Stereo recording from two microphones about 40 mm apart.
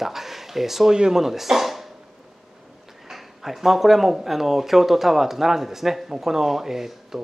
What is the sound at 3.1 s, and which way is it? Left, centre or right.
Speech, centre.